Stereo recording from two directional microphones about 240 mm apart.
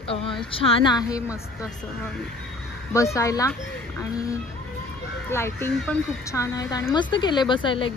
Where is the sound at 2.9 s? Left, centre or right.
Centre.